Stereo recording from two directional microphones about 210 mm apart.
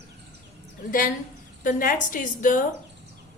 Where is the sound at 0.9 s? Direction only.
40° left (ahead or behind).